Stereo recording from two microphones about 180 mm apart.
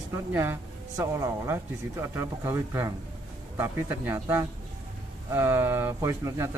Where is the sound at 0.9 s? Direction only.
15° right (ahead or behind).